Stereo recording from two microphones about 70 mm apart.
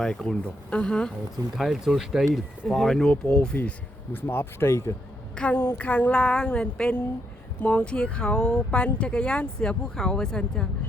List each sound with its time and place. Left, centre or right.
0.0 s speech: centre
1.5 s speech: centre
3.6 s speech: left
5.3 s a sound: centre
6.3 s speech: centre